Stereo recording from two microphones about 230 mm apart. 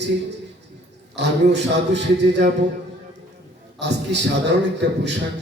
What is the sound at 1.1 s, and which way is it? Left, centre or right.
Speech, right.